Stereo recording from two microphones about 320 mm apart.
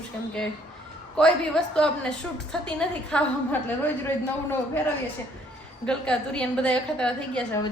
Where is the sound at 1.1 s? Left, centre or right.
Centre.